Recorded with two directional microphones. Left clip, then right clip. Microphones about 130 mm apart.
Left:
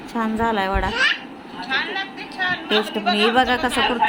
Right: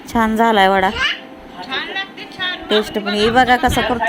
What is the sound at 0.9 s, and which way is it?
Speech, 20° right (ahead or behind).